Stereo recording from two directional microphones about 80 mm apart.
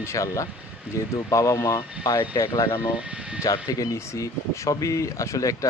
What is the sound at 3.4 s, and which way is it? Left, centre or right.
Speech, left.